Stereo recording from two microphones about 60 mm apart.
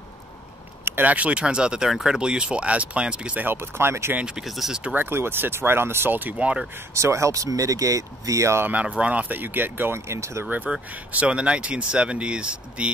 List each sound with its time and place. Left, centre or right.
1.0 s speech: right
3.4 s speech: right
4.4 s speech: centre
4.9 s speech: right
6.3 s speech: centre
6.9 s speech: right
8.8 s speech: centre; by 9.9 s right
9.9 s speech: right
11.1 s speech: right